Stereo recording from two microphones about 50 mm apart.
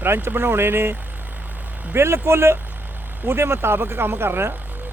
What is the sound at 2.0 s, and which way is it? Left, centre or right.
Speech, right.